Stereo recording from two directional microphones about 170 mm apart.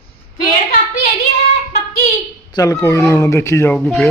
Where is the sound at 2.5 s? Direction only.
20° left (ahead or behind).